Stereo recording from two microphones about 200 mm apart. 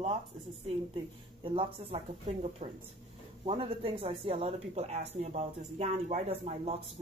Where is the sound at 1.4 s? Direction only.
25° right (ahead or behind).